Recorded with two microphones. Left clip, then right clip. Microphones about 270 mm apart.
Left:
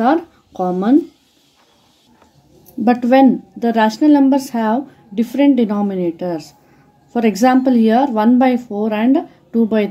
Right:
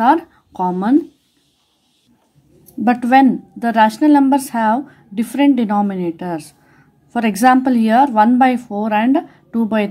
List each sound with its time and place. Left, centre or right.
0.0 s speech: centre
2.8 s a woman's voice: right